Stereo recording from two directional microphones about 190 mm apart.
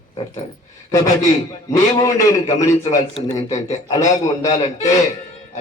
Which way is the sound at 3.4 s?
35° left (ahead or behind).